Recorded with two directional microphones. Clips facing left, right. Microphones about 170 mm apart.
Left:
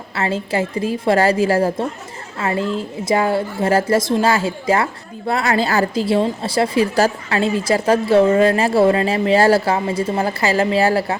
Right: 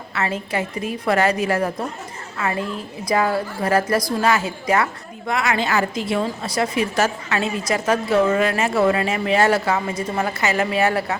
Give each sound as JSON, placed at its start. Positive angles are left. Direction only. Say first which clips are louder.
{"t": 0.1, "sound": "a woman's voice", "louder": "left 4 dB", "side_deg": 30}